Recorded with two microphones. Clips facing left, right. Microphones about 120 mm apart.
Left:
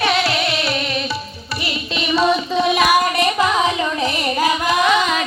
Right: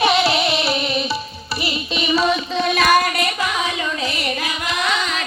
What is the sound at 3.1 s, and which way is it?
Carnatic music, 25° left (ahead or behind).